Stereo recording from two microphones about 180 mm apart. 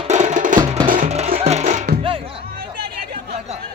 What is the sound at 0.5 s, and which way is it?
Music, 25° right (ahead or behind).